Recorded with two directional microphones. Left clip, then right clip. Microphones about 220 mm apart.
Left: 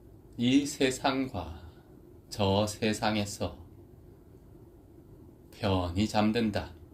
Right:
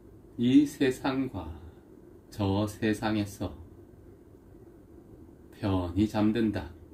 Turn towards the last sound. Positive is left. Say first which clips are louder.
# even
turn(degrees=30)  # may be behind; listen again after turning